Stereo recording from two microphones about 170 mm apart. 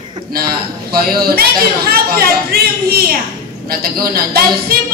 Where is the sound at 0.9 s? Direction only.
60° right (ahead or behind).